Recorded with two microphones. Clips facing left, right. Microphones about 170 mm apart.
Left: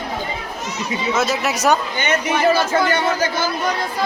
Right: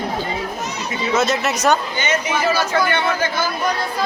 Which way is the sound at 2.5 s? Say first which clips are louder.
Left 1 dB; 25° left (ahead or behind).